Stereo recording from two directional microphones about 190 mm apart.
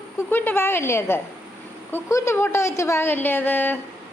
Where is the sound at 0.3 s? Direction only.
10° left (ahead or behind).